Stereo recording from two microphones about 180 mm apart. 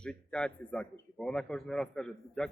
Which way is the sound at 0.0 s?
5° left (ahead or behind).